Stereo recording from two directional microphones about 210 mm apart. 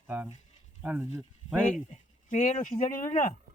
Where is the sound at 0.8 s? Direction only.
10° right (ahead or behind).